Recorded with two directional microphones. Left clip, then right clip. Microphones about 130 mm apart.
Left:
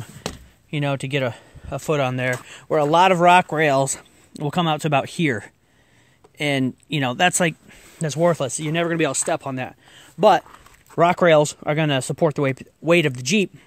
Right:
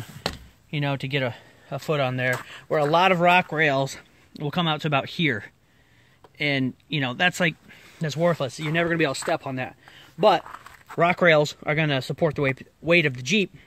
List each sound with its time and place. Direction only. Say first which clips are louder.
0.7 s speech: left 3 dB; 45° left (ahead or behind)